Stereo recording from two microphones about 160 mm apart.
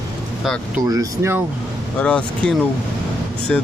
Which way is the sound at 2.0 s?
5° left (ahead or behind).